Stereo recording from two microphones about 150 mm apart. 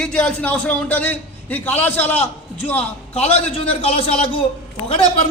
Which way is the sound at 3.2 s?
45° left (ahead or behind).